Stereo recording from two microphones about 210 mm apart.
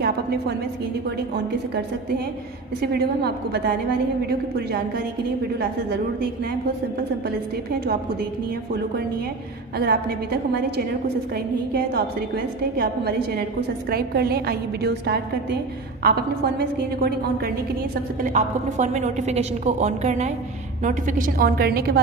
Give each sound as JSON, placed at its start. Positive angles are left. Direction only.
{"t": 0.0, "sound": "a sound", "side_deg": -50}
{"t": 2.8, "sound": "a woman's voice", "side_deg": -50}
{"t": 9.8, "sound": "a woman's voice", "side_deg": -50}
{"t": 18.2, "sound": "a woman's voice", "side_deg": -35}